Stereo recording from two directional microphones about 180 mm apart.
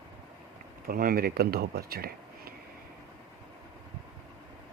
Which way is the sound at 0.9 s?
55° right (ahead or behind).